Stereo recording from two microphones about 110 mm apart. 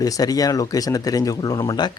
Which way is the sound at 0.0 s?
35° left (ahead or behind).